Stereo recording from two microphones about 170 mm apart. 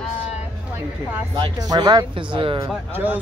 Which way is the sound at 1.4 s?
25° right (ahead or behind).